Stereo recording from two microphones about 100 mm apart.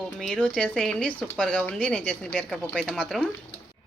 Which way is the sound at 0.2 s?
10° left (ahead or behind).